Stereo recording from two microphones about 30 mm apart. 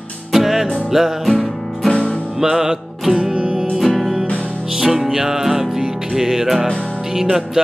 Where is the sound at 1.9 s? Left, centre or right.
Left.